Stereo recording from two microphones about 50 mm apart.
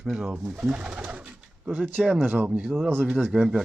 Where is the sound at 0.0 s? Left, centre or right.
Centre.